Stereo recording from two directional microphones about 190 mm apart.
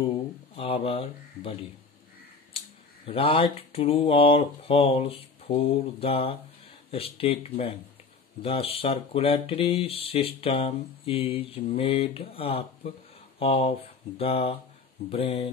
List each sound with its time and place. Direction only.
0.6 s speech: 30° left (ahead or behind)
3.1 s speech: 30° left (ahead or behind)